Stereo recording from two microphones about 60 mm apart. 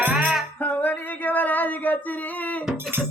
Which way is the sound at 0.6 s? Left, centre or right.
Left.